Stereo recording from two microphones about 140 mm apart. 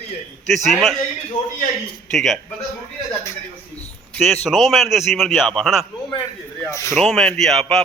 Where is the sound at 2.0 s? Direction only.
Centre (ahead or behind).